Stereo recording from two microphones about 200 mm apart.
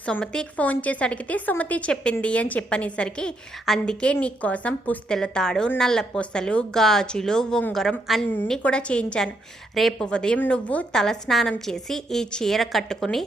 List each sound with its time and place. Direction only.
0.0 s a woman's voice: 5° left (ahead or behind)